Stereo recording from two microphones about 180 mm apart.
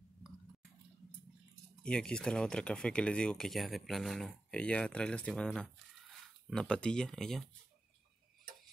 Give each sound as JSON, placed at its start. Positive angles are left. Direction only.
{"t": 1.8, "sound": "speech", "side_deg": 5}